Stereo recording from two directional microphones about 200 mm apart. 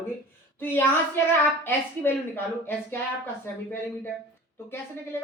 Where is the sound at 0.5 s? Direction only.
10° left (ahead or behind).